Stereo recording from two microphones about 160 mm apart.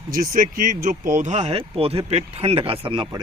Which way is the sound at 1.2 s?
45° right (ahead or behind).